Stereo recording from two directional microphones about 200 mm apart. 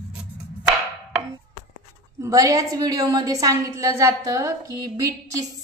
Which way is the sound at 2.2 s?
15° right (ahead or behind).